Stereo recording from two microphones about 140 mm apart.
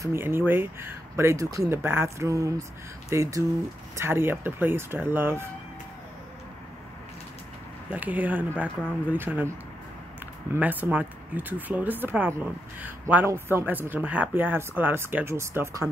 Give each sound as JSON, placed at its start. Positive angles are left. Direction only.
{"t": 0.0, "sound": "speech", "side_deg": -15}
{"t": 7.9, "sound": "speech", "side_deg": -10}
{"t": 10.5, "sound": "speech", "side_deg": -10}